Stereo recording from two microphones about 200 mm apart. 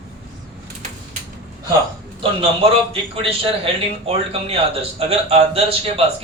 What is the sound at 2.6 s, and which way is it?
A man's voice, 30° right (ahead or behind).